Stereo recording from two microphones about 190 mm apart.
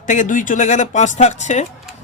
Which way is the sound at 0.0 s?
40° left (ahead or behind).